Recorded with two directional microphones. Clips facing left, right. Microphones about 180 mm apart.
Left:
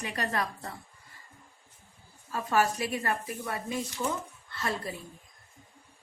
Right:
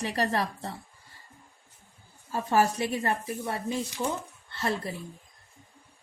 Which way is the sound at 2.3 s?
30° right (ahead or behind).